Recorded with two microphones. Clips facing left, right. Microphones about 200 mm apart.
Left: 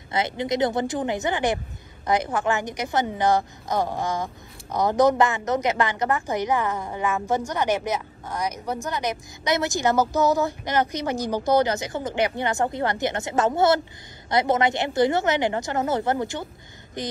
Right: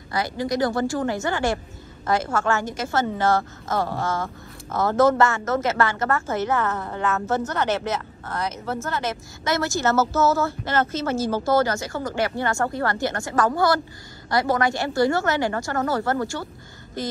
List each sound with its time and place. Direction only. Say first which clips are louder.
0.1 s a woman's voice: even; 20° left (ahead or behind)